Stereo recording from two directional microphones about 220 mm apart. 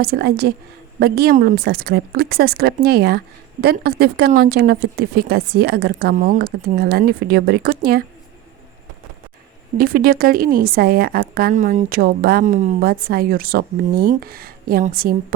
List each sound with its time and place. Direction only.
0.0 s speech: 45° right (ahead or behind)
9.7 s speech: 40° right (ahead or behind)